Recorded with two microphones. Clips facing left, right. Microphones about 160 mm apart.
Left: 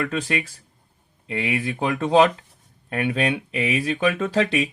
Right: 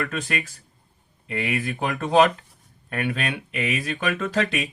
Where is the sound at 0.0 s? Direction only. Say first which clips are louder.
Left 3 dB; 30° left (ahead or behind).